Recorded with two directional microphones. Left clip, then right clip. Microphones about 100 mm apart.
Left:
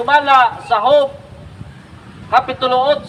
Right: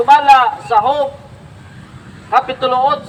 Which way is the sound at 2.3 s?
20° left (ahead or behind).